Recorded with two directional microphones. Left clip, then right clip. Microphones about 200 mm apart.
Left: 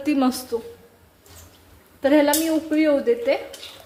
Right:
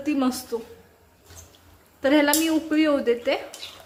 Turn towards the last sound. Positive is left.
turn(degrees=0)  # may be behind; listen again after turning